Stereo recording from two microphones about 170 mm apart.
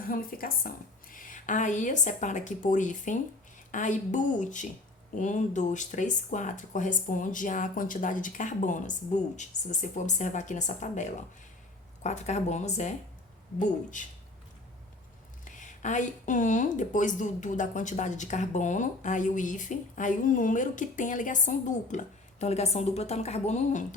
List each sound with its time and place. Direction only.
0.1 s speech: 55° left (ahead or behind)
15.4 s speech: 50° left (ahead or behind)